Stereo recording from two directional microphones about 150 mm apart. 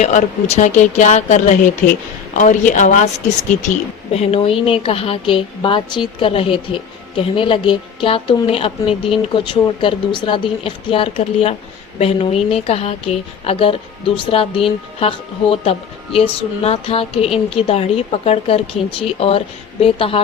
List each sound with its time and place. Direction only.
0.0 s a woman's voice: 50° left (ahead or behind)